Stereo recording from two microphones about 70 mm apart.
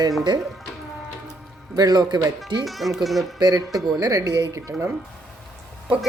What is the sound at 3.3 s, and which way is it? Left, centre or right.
Speech, right.